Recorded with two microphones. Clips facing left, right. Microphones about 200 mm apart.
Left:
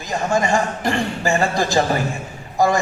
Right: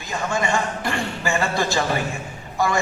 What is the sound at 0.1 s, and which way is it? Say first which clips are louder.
A man's voice: left 4 dB; 40° left (ahead or behind).